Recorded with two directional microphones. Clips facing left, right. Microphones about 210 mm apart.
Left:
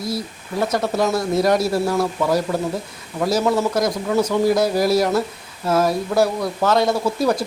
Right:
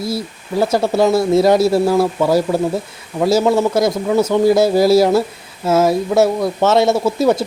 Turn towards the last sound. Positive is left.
turn(degrees=-25)  # may be behind; listen again after turning